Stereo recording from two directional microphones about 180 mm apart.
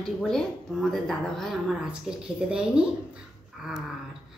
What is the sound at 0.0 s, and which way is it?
Speech, centre (ahead or behind).